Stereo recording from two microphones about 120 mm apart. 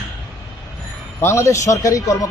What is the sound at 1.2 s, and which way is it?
Speech, 25° left (ahead or behind).